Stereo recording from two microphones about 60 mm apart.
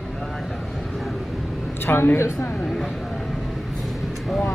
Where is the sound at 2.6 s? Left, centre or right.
Centre.